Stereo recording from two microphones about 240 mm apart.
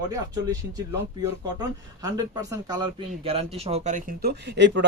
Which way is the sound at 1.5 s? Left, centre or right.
Centre.